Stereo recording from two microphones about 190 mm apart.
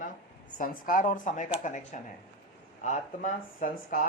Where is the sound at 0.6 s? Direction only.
45° left (ahead or behind).